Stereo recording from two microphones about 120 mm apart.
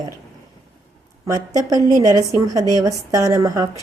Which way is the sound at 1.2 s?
30° right (ahead or behind).